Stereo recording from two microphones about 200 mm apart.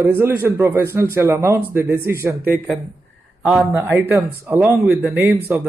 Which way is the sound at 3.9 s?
10° right (ahead or behind).